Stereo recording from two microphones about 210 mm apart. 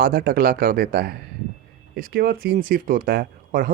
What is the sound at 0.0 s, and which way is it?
Speech, 45° right (ahead or behind).